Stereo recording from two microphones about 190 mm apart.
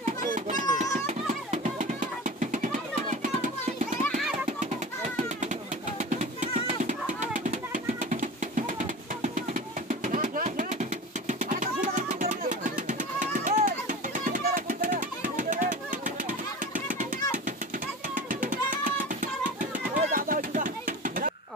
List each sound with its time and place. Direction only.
0.2 s children playing: 45° right (ahead or behind)
0.9 s music: 40° right (ahead or behind)
3.1 s a sound: 45° right (ahead or behind)
4.1 s music: 40° right (ahead or behind)
7.2 s a sound: 40° right (ahead or behind)
18.1 s music: 45° right (ahead or behind)